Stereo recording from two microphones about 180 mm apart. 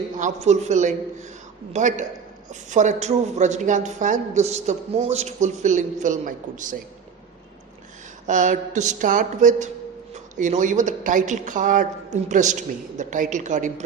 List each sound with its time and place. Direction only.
0.2 s speech: 40° right (ahead or behind)
8.3 s a woman's voice: 45° right (ahead or behind)